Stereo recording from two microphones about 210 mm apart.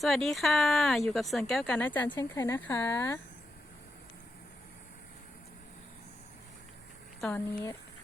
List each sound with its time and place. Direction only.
0.0 s speech: centre (ahead or behind)
7.2 s speech: 5° left (ahead or behind)